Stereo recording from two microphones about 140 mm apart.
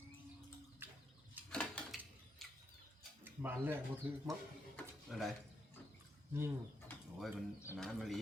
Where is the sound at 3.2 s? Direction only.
15° right (ahead or behind).